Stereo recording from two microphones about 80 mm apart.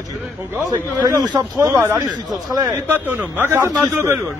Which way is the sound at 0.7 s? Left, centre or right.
Right.